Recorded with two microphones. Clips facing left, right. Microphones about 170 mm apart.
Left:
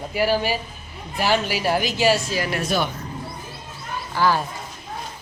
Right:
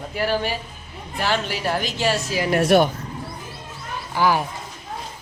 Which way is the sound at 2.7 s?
65° right (ahead or behind).